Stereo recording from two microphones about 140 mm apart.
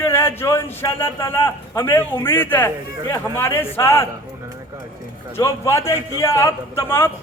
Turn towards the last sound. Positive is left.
turn(degrees=15)  # may be behind; listen again after turning